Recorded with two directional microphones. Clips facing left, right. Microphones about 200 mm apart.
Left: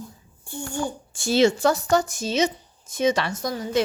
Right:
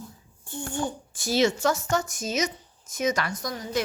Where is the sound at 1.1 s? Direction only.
30° left (ahead or behind).